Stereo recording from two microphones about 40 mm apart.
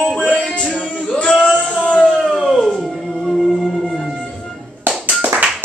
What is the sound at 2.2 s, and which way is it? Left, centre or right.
Howl, centre.